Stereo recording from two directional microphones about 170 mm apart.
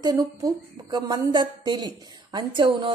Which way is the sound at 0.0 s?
20° right (ahead or behind).